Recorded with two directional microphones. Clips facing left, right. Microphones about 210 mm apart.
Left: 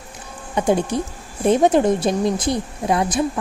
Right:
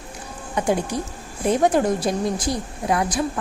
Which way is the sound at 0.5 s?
25° left (ahead or behind).